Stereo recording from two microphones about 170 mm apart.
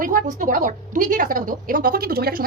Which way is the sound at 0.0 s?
55° right (ahead or behind).